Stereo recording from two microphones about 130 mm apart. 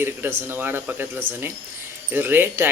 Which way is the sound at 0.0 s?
15° right (ahead or behind).